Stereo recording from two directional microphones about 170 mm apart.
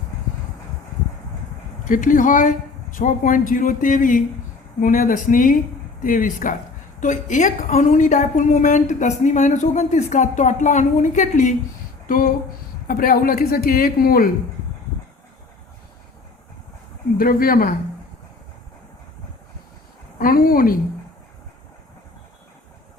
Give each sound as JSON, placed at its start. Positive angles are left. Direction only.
{"t": 1.9, "sound": "a woman's voice", "side_deg": 50}
{"t": 12.0, "sound": "a sound", "side_deg": 55}
{"t": 12.9, "sound": "speech", "side_deg": 55}
{"t": 17.2, "sound": "speech", "side_deg": 60}
{"t": 20.1, "sound": "speech", "side_deg": 55}